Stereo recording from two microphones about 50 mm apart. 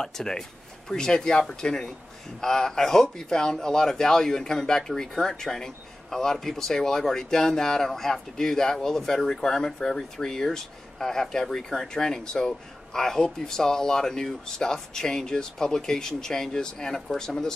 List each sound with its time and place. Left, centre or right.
0.0 s speech: centre